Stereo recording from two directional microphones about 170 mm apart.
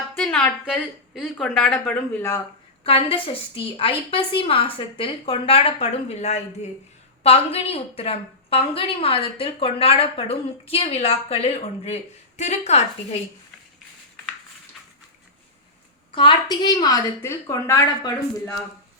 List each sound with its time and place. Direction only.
0.2 s a sound: 10° left (ahead or behind)
0.6 s speech: 5° right (ahead or behind)
1.8 s speech: 10° left (ahead or behind)
2.8 s a woman's voice: 35° left (ahead or behind)
16.1 s a woman's voice: 25° left (ahead or behind)